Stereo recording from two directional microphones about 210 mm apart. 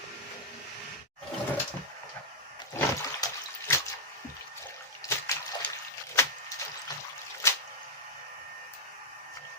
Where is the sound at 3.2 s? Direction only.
20° left (ahead or behind).